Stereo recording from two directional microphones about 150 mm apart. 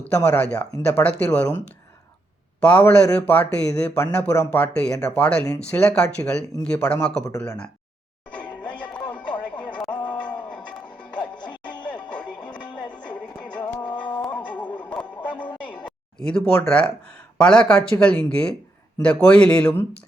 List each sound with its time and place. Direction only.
0.0 s speech: 10° left (ahead or behind)
2.6 s speech: 10° left (ahead or behind)
8.8 s music: 10° left (ahead or behind)
9.6 s a sound: 5° left (ahead or behind)
11.9 s music: 10° left (ahead or behind)
13.7 s music: 30° left (ahead or behind)
14.3 s a sound: 10° left (ahead or behind)
16.2 s speech: 5° left (ahead or behind)